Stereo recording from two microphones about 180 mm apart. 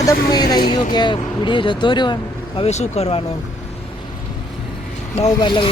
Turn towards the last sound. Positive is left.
turn(degrees=25)  # may be behind; listen again after turning